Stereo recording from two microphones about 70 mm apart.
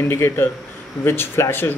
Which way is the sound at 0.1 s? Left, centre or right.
Left.